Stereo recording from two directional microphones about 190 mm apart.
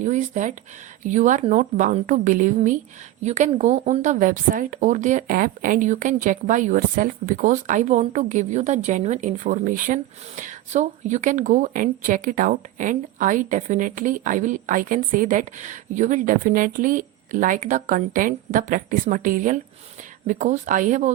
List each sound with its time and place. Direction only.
0.0 s a woman's voice: 40° right (ahead or behind)